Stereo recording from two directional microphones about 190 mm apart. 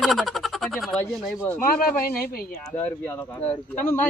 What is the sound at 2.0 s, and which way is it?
Speech, 50° left (ahead or behind).